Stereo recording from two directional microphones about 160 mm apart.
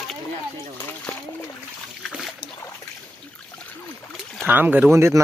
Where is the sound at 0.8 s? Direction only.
15° left (ahead or behind).